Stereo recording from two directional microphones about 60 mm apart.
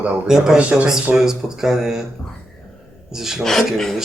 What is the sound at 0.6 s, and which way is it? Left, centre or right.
Speech, centre.